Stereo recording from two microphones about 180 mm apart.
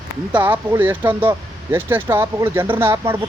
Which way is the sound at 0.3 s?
15° right (ahead or behind).